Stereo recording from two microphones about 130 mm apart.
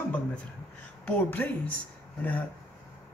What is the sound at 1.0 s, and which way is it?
Speech, 10° left (ahead or behind).